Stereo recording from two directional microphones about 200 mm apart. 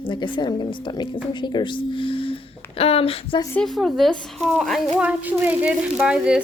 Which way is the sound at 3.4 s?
5° left (ahead or behind).